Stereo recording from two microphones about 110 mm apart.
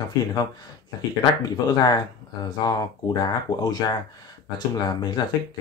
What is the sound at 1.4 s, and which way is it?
Speech, 35° left (ahead or behind).